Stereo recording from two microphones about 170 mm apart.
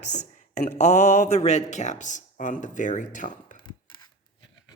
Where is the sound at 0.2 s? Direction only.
45° left (ahead or behind).